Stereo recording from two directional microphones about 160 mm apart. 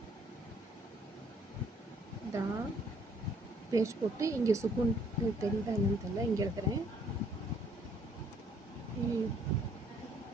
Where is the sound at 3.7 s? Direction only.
20° right (ahead or behind).